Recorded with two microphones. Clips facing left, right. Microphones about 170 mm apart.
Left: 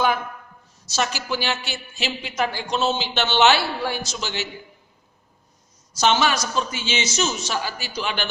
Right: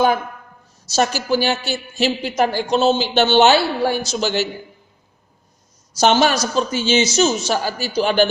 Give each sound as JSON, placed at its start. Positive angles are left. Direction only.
{"t": 0.9, "sound": "a woman's voice", "side_deg": -40}
{"t": 6.0, "sound": "a woman's voice", "side_deg": -40}